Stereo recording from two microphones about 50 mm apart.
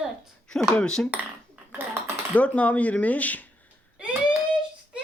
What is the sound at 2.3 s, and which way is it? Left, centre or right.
Speech, left.